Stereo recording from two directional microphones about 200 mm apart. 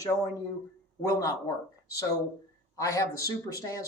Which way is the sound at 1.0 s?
15° left (ahead or behind).